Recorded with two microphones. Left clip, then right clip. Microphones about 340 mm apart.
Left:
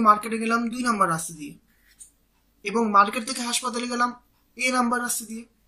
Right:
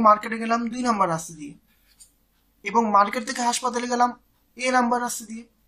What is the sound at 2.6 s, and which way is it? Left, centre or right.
Speech, centre.